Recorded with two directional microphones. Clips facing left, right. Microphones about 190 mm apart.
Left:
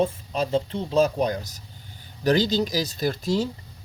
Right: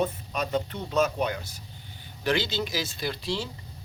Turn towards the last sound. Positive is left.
turn(degrees=45)  # may be behind; listen again after turning